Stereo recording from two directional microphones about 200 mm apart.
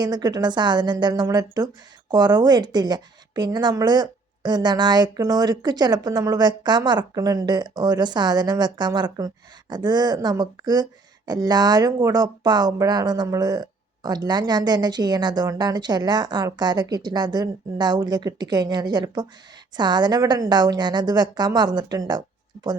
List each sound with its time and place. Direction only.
0.0 s a woman's voice: 20° right (ahead or behind)